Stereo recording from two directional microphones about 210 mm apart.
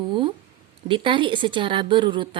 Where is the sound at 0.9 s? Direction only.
25° right (ahead or behind).